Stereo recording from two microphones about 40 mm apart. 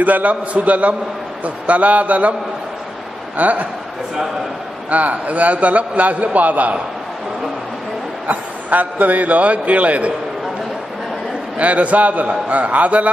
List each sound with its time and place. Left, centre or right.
0.0 s a man's voice: right
3.3 s a man's voice: right
4.8 s a man's voice: right
8.3 s a man's voice: right
11.5 s a man's voice: right